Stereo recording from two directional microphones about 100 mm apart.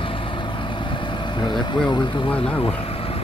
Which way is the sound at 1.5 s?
50° left (ahead or behind).